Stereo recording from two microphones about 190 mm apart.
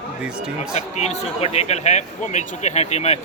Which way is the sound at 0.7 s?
35° left (ahead or behind).